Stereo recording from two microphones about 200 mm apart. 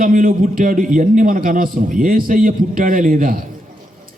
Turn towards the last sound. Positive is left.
turn(degrees=-40)  # may be behind; listen again after turning